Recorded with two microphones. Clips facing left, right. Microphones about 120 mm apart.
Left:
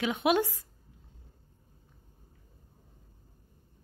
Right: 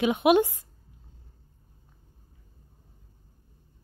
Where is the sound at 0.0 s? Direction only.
15° right (ahead or behind).